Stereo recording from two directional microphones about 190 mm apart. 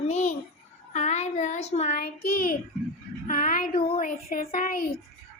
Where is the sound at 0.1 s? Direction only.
35° left (ahead or behind).